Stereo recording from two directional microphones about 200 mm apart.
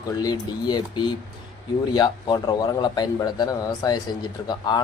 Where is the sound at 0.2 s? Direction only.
20° left (ahead or behind).